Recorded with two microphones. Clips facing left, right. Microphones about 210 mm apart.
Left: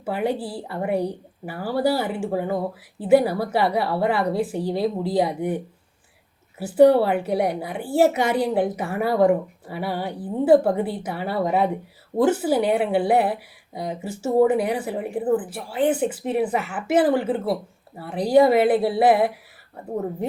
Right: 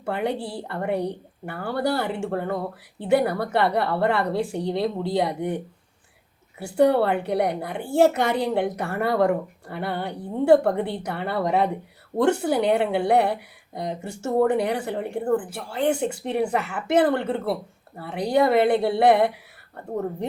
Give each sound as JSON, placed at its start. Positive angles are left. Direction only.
{"t": 0.0, "sound": "speech", "side_deg": 5}